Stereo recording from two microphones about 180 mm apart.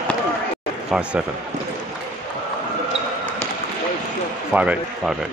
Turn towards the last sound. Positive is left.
turn(degrees=-5)  # may be behind; listen again after turning